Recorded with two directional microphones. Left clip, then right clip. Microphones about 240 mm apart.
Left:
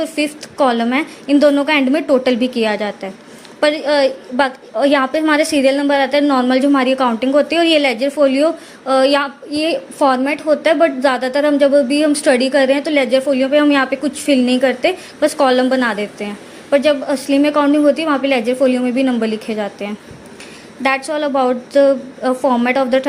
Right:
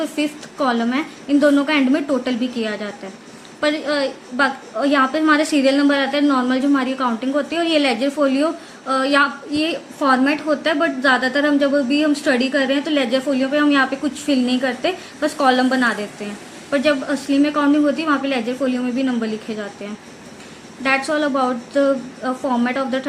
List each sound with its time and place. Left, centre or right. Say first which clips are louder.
0.0 s a woman's voice: left 3 dB; left